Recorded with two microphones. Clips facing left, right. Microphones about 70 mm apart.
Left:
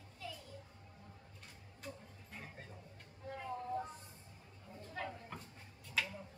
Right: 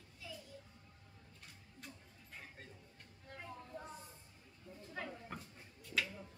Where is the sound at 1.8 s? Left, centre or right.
Centre.